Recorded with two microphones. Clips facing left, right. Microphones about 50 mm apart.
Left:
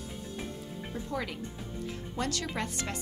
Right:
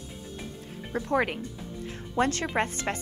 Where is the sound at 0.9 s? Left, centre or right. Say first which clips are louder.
Right 10 dB; right.